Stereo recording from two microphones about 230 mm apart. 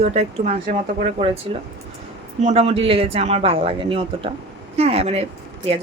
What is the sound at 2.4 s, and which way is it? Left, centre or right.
A woman's voice, right.